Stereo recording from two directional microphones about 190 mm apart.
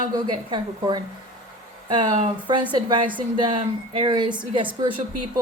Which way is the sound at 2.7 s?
25° right (ahead or behind).